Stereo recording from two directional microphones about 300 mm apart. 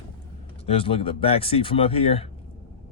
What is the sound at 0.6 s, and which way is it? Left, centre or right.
Speech, centre.